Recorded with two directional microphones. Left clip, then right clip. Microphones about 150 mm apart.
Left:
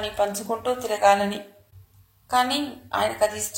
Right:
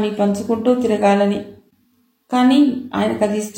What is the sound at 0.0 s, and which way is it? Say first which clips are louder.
A woman's voice: right 5 dB; 35° left (ahead or behind).